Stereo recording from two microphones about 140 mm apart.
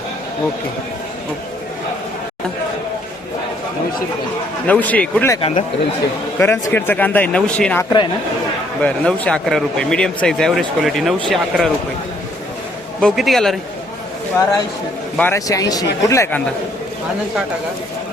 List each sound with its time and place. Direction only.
4.6 s speech: 10° left (ahead or behind)
5.4 s speech: 45° left (ahead or behind)
6.4 s speech: 15° left (ahead or behind)
7.9 s speech: 35° left (ahead or behind)
8.8 s speech: 10° left (ahead or behind)
13.0 s speech: 5° left (ahead or behind)
15.2 s speech: 20° left (ahead or behind)